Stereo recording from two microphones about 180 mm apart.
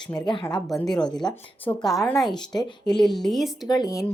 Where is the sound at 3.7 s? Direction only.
20° left (ahead or behind).